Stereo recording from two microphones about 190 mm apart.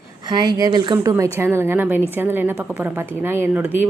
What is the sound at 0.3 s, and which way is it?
A woman's voice, 20° right (ahead or behind).